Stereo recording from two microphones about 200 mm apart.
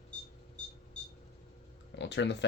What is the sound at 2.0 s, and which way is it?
Speech, 60° left (ahead or behind).